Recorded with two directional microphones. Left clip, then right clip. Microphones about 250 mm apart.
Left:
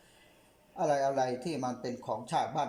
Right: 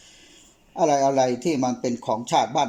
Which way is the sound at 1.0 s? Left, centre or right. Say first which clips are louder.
Right 10 dB; centre.